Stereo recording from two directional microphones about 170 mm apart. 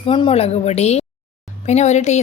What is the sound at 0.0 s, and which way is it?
A woman's voice, 30° left (ahead or behind).